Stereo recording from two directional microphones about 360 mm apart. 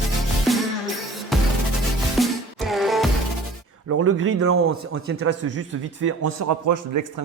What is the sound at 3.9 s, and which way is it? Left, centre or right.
A man's voice, right.